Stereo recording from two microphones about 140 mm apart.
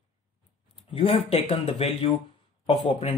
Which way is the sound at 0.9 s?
45° left (ahead or behind).